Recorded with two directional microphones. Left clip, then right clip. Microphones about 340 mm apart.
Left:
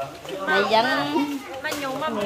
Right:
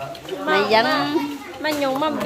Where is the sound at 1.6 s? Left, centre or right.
Centre.